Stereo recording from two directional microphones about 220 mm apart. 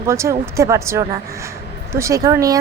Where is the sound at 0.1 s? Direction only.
15° right (ahead or behind).